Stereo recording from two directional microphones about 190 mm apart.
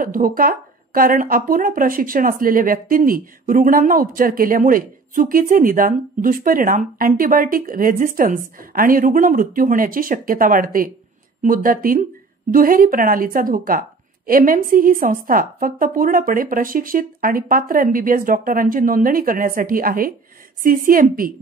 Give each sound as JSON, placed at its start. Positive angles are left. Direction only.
{"t": 0.0, "sound": "speech", "side_deg": -45}